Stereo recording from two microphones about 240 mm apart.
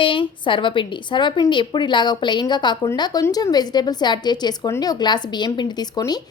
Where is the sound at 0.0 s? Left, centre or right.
Left.